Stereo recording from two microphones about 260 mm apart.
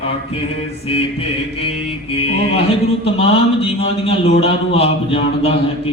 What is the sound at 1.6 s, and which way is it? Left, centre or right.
Speech, left.